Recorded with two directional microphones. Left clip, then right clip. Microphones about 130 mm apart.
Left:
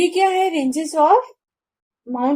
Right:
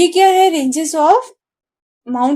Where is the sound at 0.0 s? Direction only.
35° right (ahead or behind).